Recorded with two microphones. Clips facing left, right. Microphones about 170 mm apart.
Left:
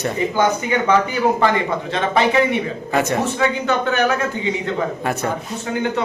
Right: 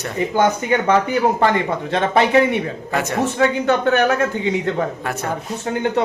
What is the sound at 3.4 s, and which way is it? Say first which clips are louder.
Speech: right 2 dB; 55° right (ahead or behind).